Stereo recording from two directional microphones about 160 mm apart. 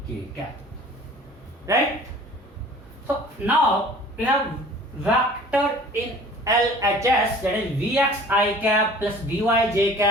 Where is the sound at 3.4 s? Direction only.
10° right (ahead or behind).